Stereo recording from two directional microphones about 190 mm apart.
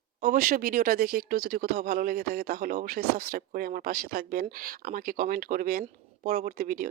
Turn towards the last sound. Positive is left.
turn(degrees=-50)  # may be behind; listen again after turning